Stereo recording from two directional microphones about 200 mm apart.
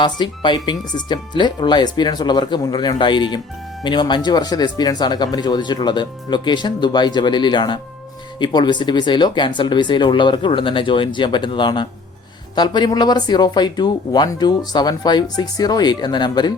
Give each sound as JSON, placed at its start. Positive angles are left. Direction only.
{"t": 0.0, "sound": "speech", "side_deg": 20}